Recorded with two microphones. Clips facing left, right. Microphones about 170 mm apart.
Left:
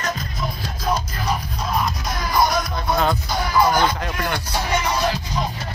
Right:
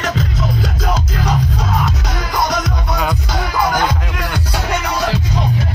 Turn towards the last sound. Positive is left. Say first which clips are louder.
# right 2 dB
turn(degrees=-65)  # may be behind; listen again after turning